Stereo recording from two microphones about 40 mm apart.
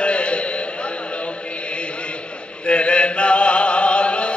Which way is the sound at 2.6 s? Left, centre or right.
Left.